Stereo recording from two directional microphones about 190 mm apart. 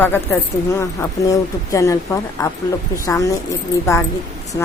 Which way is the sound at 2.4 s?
20° left (ahead or behind).